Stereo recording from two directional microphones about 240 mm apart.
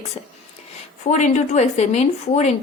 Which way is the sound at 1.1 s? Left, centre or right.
Left.